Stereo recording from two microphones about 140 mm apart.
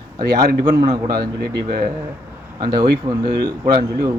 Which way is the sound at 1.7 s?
90° right.